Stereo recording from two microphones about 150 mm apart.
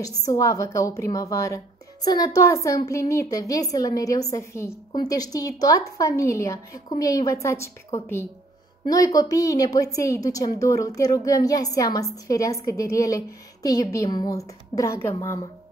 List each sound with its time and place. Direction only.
0.0 s a woman's voice: 25° left (ahead or behind)